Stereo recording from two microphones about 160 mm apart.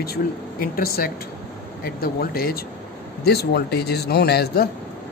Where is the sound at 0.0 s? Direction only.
70° left (ahead or behind).